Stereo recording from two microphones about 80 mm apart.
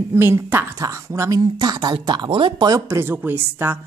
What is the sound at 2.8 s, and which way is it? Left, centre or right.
Speech, right.